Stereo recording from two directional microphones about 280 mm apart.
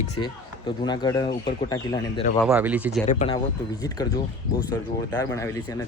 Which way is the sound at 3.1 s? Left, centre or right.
Left.